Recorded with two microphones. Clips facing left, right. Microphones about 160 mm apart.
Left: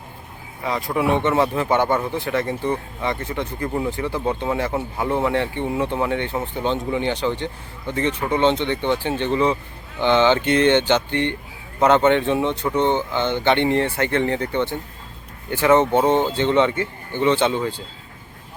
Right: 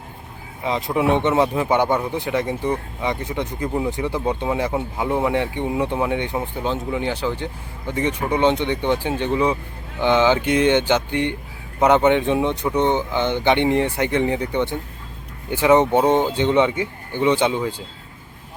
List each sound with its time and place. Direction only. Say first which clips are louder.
0.6 s speech: right 1 dB; 20° right (ahead or behind)